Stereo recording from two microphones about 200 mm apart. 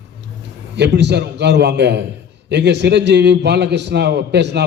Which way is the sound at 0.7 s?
60° right (ahead or behind).